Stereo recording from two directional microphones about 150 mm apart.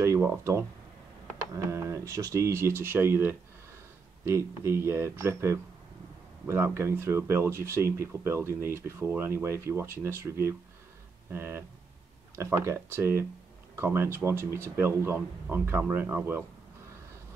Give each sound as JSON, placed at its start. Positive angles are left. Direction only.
{"t": 0.0, "sound": "speech", "side_deg": -20}